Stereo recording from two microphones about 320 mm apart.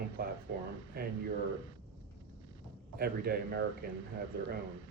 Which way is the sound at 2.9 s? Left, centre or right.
Right.